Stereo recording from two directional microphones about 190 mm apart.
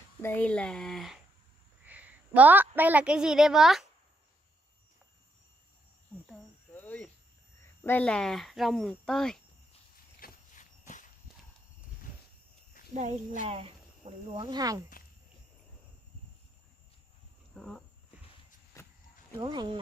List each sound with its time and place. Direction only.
0.2 s a woman's voice: 10° left (ahead or behind)
6.2 s a sound: 5° left (ahead or behind)
7.8 s speech: 10° left (ahead or behind)
10.2 s walk: 45° left (ahead or behind)
12.9 s speech: 40° right (ahead or behind); by 14.8 s 20° right (ahead or behind)
17.6 s speech: centre (ahead or behind)
18.8 s a sound: 15° left (ahead or behind)
19.3 s speech: 25° right (ahead or behind)